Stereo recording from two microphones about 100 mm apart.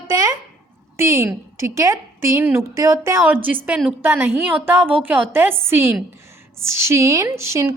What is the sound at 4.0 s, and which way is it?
A woman's voice, 20° right (ahead or behind).